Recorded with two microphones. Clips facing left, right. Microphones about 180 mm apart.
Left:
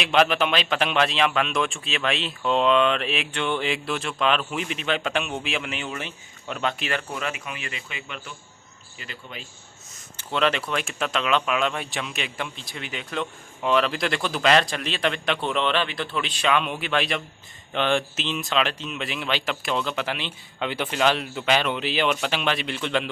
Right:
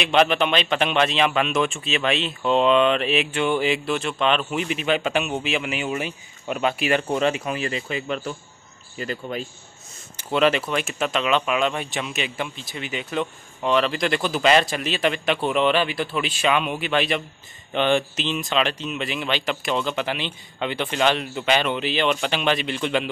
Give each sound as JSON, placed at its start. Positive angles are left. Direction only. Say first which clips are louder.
{"t": 0.0, "sound": "a man's voice", "louder": "right 2 dB", "side_deg": 0}
{"t": 7.0, "sound": "speech", "louder": "right 9 dB", "side_deg": -25}
{"t": 10.1, "sound": "a man's voice", "louder": "right 4 dB", "side_deg": -5}